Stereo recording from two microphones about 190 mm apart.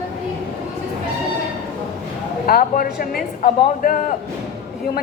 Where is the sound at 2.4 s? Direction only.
50° left (ahead or behind).